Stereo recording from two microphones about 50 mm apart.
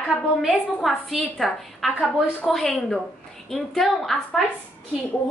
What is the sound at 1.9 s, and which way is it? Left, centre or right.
Speech, left.